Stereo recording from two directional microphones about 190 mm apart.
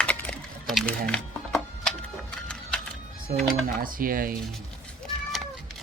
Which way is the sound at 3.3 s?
50° right (ahead or behind).